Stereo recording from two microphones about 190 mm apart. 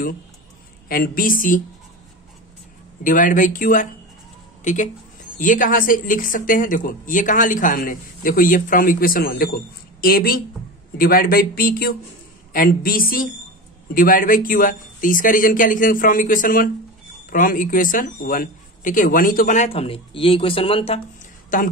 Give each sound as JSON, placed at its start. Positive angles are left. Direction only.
{"t": 0.8, "sound": "speech", "side_deg": 50}
{"t": 3.0, "sound": "speech", "side_deg": 45}
{"t": 21.5, "sound": "speech", "side_deg": 45}